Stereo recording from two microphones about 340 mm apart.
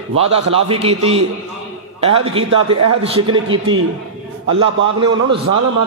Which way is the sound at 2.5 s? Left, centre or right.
Right.